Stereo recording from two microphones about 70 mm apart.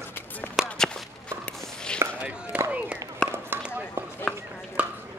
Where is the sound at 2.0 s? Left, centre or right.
Right.